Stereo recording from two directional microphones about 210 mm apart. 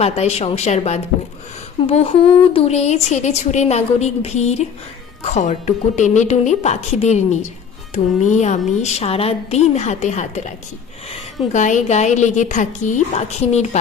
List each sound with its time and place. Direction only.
0.0 s a woman's voice: 30° left (ahead or behind)
11.5 s a woman's voice: 35° left (ahead or behind)